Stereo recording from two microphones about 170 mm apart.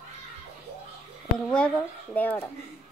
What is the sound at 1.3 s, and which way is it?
A woman's voice, 5° left (ahead or behind).